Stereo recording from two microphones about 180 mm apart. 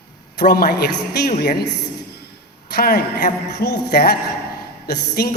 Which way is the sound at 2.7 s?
60° left (ahead or behind).